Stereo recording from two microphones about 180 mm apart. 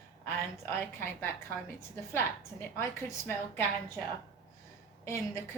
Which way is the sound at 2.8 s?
15° left (ahead or behind).